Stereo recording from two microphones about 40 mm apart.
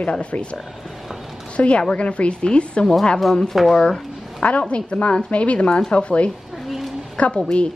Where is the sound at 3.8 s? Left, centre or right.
Left.